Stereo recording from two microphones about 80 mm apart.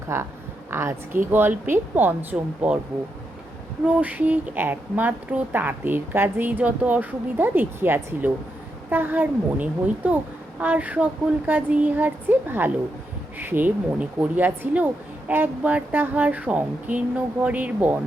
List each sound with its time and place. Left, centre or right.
0.1 s a woman's voice: right
3.8 s a woman's voice: centre